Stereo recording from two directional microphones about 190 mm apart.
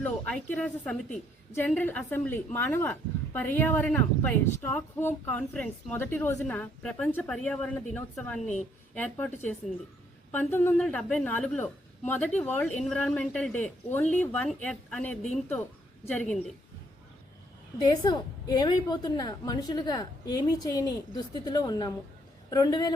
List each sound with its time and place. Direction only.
0.0 s a woman's voice: 5° left (ahead or behind)
17.7 s a woman's voice: 20° left (ahead or behind)